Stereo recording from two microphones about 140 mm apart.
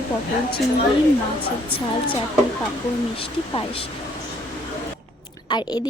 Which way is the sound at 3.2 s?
40° left (ahead or behind).